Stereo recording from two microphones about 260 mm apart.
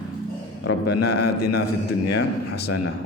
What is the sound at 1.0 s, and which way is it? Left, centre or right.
Speech, left.